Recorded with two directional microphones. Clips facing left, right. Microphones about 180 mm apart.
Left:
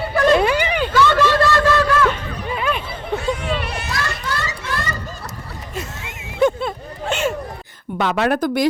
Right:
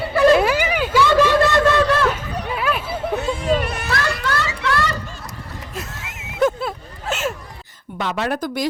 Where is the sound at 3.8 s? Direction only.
65° right (ahead or behind).